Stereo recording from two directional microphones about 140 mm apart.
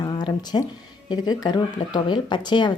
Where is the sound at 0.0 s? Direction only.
30° left (ahead or behind).